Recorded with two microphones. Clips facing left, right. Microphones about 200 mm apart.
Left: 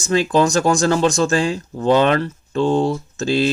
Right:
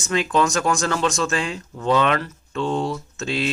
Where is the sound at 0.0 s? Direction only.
35° left (ahead or behind).